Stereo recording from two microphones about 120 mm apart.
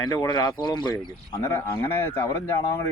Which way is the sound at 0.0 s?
35° left (ahead or behind).